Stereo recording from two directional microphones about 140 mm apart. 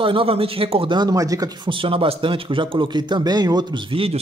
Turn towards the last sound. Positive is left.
turn(degrees=-40)  # may be behind; listen again after turning